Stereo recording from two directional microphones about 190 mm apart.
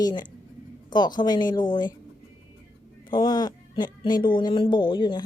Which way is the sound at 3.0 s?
20° left (ahead or behind).